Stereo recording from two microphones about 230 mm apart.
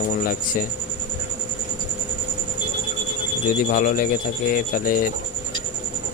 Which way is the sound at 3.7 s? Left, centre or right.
Left.